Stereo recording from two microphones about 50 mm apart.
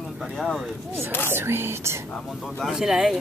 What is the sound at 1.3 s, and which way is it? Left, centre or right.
Speech, right.